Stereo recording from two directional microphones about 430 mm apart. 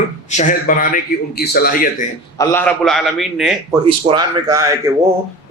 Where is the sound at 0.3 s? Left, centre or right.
Centre.